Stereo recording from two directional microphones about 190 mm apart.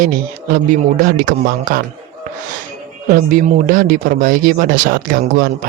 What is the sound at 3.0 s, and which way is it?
Speech, 45° right (ahead or behind).